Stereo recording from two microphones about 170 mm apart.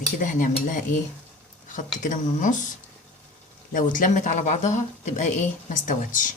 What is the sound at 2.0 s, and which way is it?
Speech, 50° left (ahead or behind).